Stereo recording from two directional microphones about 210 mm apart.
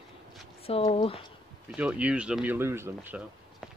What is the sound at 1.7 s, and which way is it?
Speech, 5° right (ahead or behind).